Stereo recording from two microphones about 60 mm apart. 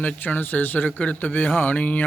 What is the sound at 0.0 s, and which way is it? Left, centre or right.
Speech, left.